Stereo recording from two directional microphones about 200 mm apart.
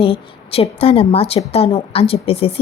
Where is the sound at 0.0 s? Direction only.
30° left (ahead or behind).